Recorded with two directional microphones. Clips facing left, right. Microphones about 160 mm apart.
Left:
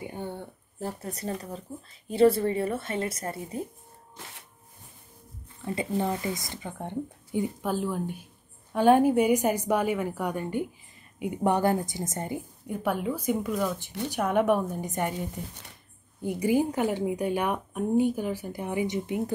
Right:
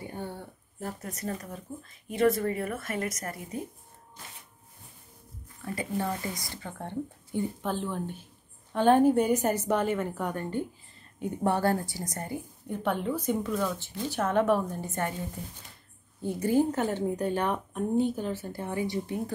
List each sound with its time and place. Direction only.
0.0 s a sound: 15° left (ahead or behind)
0.7 s speech: 30° left (ahead or behind)
5.6 s speech: 25° left (ahead or behind)
12.6 s speech: 10° left (ahead or behind)